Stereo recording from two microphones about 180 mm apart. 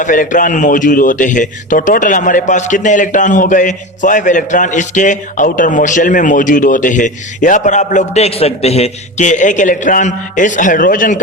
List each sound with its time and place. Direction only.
0.0 s a man's voice: 45° left (ahead or behind)